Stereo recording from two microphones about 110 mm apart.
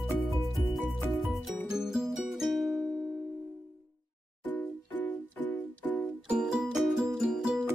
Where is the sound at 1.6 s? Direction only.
5° right (ahead or behind).